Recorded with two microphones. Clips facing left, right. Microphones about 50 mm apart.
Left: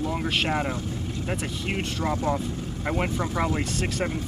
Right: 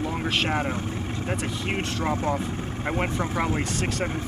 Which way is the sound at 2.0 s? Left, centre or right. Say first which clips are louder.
Even; right.